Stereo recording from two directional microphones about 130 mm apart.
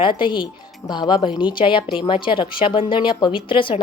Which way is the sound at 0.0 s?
40° left (ahead or behind).